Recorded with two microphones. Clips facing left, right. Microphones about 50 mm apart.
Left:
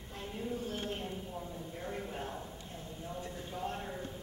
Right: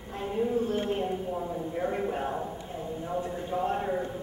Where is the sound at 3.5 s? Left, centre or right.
Right.